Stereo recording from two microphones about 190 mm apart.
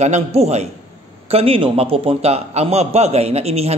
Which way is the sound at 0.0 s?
35° right (ahead or behind).